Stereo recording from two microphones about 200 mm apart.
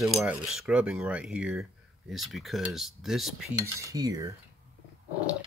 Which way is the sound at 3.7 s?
15° right (ahead or behind).